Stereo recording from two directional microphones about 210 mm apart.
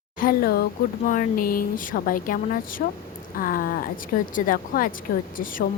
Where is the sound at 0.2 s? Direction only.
45° left (ahead or behind).